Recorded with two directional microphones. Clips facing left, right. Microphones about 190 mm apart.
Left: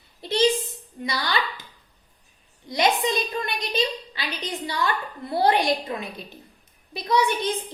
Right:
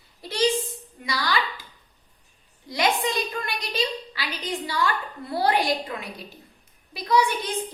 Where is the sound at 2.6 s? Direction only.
20° left (ahead or behind).